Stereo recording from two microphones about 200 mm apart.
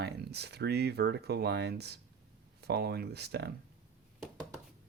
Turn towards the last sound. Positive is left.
turn(degrees=-55)  # may be behind; listen again after turning